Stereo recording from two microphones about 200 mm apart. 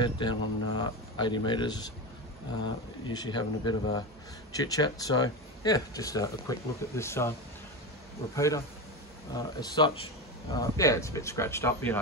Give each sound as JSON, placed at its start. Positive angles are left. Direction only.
{"t": 0.0, "sound": "speech", "side_deg": 25}
{"t": 3.1, "sound": "speech", "side_deg": 20}
{"t": 8.4, "sound": "speech", "side_deg": 15}